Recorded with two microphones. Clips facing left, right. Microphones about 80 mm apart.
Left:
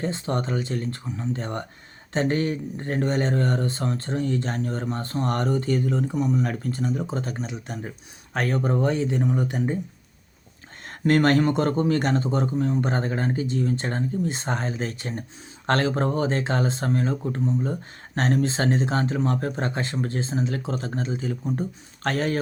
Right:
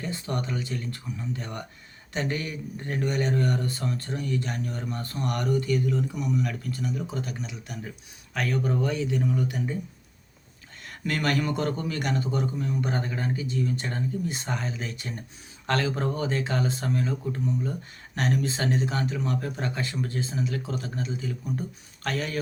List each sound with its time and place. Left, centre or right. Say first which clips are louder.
0.0 s speech: left 5 dB; left
10.8 s speech: left 8 dB; left